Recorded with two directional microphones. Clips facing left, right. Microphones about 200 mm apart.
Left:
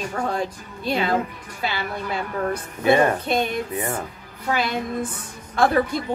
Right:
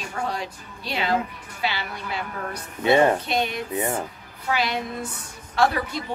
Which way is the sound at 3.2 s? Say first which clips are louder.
Left 3 dB; 50° left (ahead or behind).